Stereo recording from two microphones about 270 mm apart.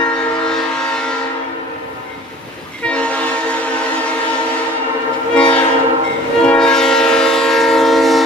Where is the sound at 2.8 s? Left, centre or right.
Centre.